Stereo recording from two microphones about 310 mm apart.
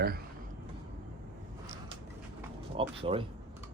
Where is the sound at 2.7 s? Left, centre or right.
Centre.